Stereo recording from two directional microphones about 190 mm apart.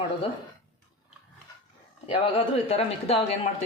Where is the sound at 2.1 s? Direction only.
30° left (ahead or behind).